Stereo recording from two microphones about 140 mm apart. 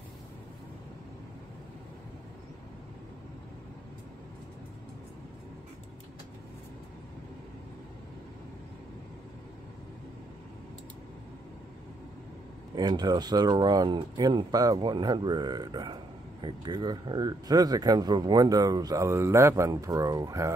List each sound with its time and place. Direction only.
12.7 s speech: 30° right (ahead or behind)